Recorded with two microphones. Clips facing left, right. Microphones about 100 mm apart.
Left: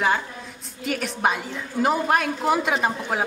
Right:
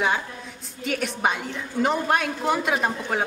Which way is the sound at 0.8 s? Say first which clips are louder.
Left 1 dB; centre (ahead or behind).